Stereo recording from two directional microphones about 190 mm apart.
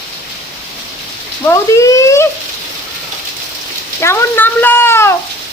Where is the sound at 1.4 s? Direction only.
15° left (ahead or behind).